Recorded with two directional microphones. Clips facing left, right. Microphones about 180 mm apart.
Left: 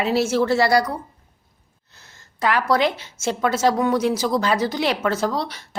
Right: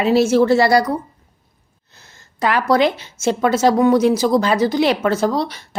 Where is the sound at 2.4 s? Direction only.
20° right (ahead or behind).